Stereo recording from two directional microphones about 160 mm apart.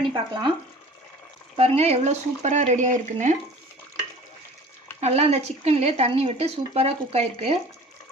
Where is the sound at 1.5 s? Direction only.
40° right (ahead or behind).